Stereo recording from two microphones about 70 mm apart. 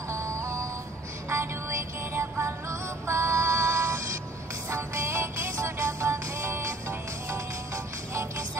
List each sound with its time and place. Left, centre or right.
0.1 s music: right